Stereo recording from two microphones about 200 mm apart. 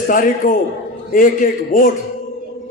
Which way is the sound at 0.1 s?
45° left (ahead or behind).